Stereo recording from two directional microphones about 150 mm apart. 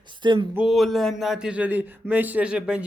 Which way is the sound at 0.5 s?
Centre (ahead or behind).